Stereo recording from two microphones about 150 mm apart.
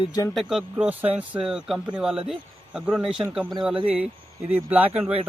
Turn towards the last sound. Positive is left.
turn(degrees=-10)  # may be behind; listen again after turning